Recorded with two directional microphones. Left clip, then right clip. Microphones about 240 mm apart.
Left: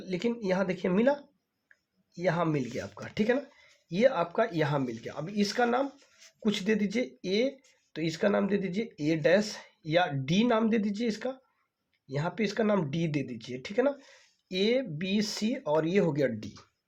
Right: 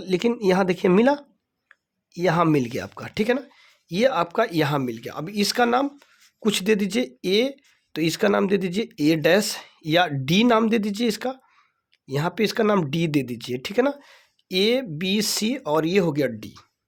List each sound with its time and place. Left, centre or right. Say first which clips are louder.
0.0 s speech: right 10 dB; right